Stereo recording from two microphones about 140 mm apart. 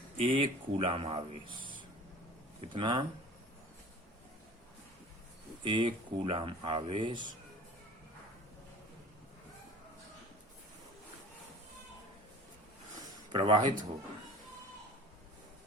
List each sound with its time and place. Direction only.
0.2 s speech: 40° right (ahead or behind)
2.6 s speech: 35° right (ahead or behind)
5.6 s speech: 35° right (ahead or behind)
13.3 s speech: 35° right (ahead or behind)